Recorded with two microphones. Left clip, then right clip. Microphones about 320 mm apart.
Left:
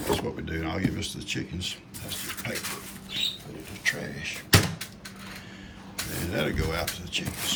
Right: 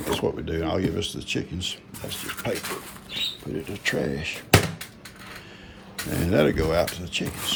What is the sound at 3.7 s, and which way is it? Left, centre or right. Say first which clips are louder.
Speech: right 2 dB; centre.